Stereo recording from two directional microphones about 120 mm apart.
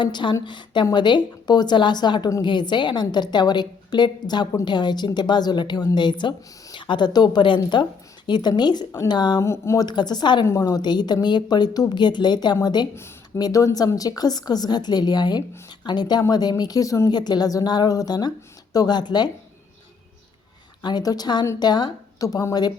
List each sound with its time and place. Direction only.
0.0 s a woman's voice: 40° left (ahead or behind)
9.4 s speech: 25° left (ahead or behind)
9.8 s a woman's voice: 35° left (ahead or behind)
10.4 s a woman's voice: 25° left (ahead or behind)
13.0 s a woman's voice: 25° left (ahead or behind)
20.8 s a woman's voice: 35° left (ahead or behind)